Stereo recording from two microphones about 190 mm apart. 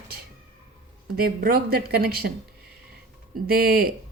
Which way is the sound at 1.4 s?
50° right (ahead or behind).